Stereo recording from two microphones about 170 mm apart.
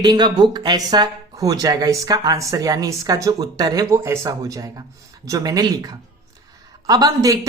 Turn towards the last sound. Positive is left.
turn(degrees=-20)  # may be behind; listen again after turning